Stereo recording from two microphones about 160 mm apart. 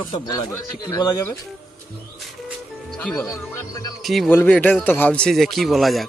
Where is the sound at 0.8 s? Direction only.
25° left (ahead or behind).